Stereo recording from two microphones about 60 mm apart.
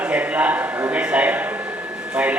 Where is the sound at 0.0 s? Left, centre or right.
Right.